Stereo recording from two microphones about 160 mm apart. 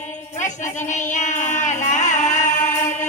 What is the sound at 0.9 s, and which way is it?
Singing, 50° left (ahead or behind).